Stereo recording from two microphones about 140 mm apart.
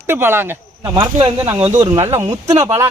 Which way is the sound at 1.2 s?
30° right (ahead or behind).